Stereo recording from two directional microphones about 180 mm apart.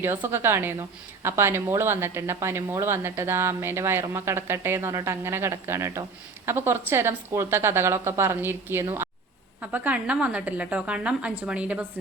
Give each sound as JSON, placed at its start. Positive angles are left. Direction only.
{"t": 0.0, "sound": "a woman's voice", "side_deg": -10}